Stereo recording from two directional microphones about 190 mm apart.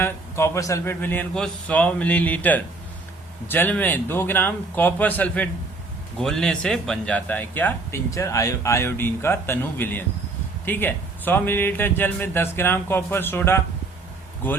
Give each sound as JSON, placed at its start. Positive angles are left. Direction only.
{"t": 0.0, "sound": "a man's voice", "side_deg": 15}